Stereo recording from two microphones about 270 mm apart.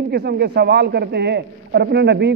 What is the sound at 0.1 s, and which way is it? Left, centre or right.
A man's voice, right.